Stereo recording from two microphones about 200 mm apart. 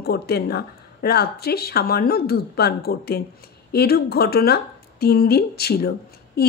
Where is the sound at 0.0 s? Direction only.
50° left (ahead or behind).